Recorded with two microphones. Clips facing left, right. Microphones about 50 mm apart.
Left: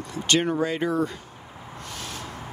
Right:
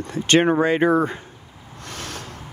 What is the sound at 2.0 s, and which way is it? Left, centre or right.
Rub, right.